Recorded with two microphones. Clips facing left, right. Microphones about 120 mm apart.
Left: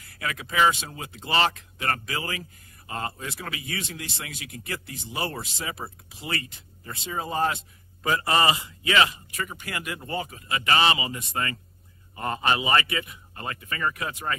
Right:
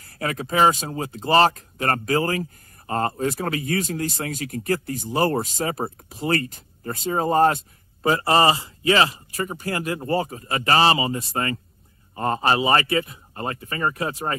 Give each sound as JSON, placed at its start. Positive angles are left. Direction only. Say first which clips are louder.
{"t": 0.0, "sound": "speech", "louder": "right 6 dB", "side_deg": -40}